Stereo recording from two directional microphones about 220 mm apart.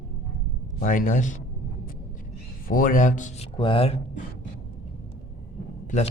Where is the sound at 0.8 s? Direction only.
40° left (ahead or behind).